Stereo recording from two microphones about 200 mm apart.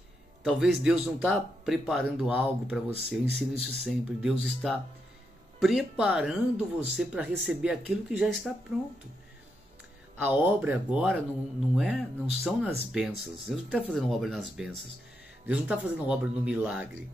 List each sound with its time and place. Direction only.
0.4 s speech: centre (ahead or behind)
10.1 s speech: 10° right (ahead or behind)